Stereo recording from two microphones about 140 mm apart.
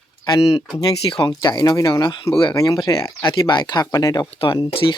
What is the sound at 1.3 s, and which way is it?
Speech, 30° left (ahead or behind).